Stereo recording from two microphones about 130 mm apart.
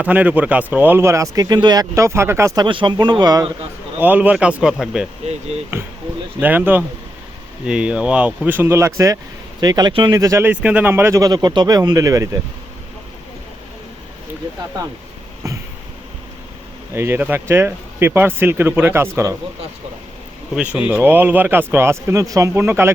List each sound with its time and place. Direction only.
0.0 s speech: 10° right (ahead or behind)
2.6 s a man's voice: 40° right (ahead or behind)
3.9 s speech: 15° right (ahead or behind)
6.4 s a man's voice: 15° right (ahead or behind); by 10.2 s 35° right (ahead or behind)
10.2 s speech: 25° right (ahead or behind)
10.5 s speech: 10° right (ahead or behind); by 12.4 s 25° right (ahead or behind)
15.4 s a sound: 25° right (ahead or behind)
16.9 s speech: 20° right (ahead or behind)
20.6 s speech: 10° right (ahead or behind)